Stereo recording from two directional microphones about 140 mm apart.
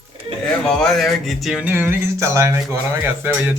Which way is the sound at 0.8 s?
Centre (ahead or behind).